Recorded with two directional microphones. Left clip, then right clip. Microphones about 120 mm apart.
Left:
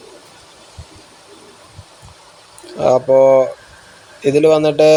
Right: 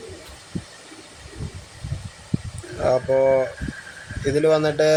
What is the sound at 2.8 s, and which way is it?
Speech, 35° left (ahead or behind).